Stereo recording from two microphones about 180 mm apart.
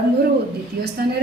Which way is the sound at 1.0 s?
60° right (ahead or behind).